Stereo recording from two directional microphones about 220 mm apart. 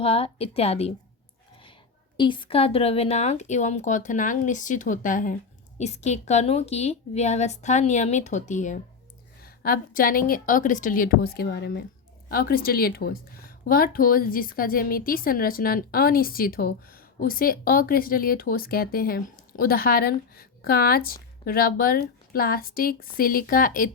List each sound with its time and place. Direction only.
0.0 s a woman's voice: 25° left (ahead or behind)
2.1 s speech: 20° left (ahead or behind); by 23.9 s 40° left (ahead or behind)